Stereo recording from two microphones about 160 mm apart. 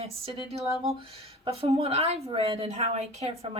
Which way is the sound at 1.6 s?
40° right (ahead or behind).